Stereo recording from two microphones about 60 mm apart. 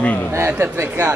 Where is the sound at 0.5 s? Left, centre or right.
Right.